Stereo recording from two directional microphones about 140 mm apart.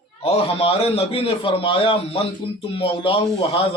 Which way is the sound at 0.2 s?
45° left (ahead or behind).